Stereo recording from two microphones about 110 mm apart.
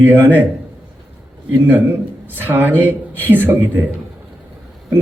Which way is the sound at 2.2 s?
20° right (ahead or behind).